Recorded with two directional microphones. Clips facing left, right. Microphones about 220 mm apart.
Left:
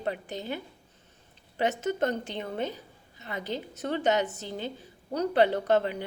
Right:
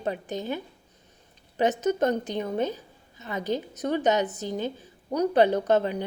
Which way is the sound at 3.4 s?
15° right (ahead or behind).